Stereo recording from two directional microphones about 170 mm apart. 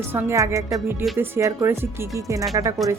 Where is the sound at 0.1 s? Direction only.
15° right (ahead or behind).